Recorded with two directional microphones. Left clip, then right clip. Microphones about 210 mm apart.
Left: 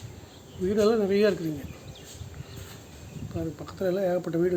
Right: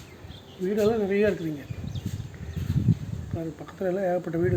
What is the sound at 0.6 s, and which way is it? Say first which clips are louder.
Speech: left 1 dB; 10° left (ahead or behind).